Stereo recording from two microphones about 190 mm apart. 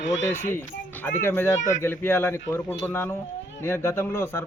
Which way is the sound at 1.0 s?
10° left (ahead or behind).